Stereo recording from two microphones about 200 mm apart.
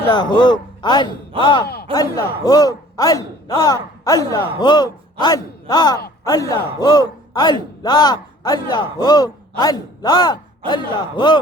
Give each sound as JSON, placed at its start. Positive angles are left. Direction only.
{"t": 0.1, "sound": "a man's voice", "side_deg": 20}
{"t": 1.6, "sound": "speech", "side_deg": 50}
{"t": 1.9, "sound": "a man's voice", "side_deg": 20}